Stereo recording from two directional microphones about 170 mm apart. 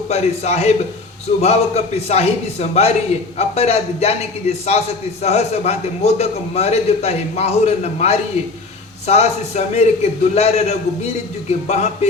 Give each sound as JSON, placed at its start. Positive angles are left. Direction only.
{"t": 0.1, "sound": "a man's voice", "side_deg": 40}